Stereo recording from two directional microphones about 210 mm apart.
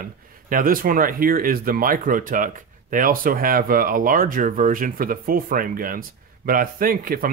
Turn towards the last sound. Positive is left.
turn(degrees=-40)  # may be behind; listen again after turning